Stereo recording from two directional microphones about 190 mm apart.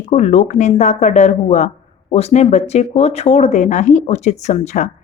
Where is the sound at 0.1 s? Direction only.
35° left (ahead or behind).